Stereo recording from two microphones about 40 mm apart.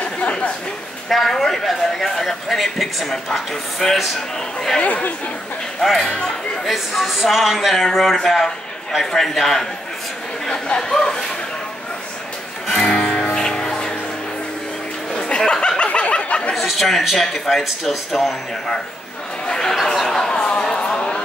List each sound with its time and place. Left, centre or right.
0.0 s chatter: left
1.0 s speech: centre
4.8 s speech: left
5.8 s speech: centre
6.0 s speech: left
6.9 s a man's voice: centre
10.8 s a man's voice: centre
12.7 s music: left
15.1 s music: left
15.8 s a sound: left
16.5 s speech: centre
19.4 s a sound: centre